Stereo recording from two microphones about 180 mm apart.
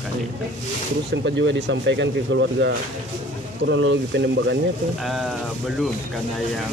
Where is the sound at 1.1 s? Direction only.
75° right (ahead or behind).